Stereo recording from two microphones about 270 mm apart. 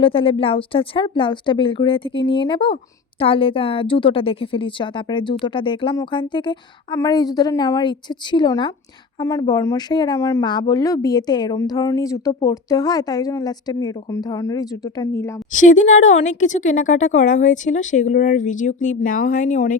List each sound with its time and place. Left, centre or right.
0.0 s speech: centre
15.5 s speech: left